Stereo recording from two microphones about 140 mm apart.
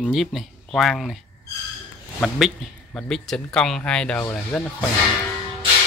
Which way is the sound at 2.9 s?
5° left (ahead or behind).